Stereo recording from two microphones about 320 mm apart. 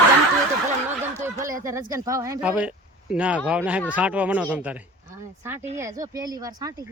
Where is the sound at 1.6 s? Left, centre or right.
Centre.